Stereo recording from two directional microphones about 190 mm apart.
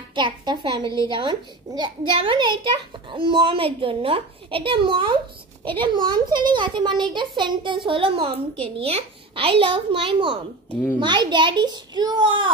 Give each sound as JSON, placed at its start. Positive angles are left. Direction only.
{"t": 0.1, "sound": "a child's voice", "side_deg": -25}